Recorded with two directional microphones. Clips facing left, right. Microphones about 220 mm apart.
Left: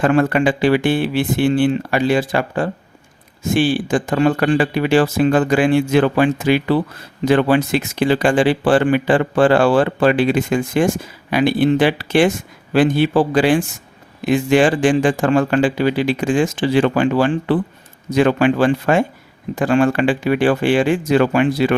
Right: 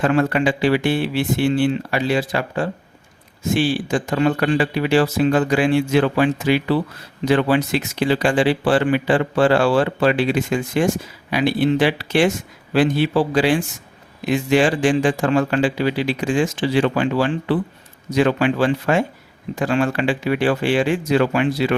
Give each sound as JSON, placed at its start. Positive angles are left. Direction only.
{"t": 0.0, "sound": "speech", "side_deg": 50}